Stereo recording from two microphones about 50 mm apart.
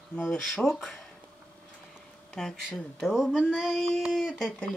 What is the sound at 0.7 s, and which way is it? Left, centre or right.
Speech, centre.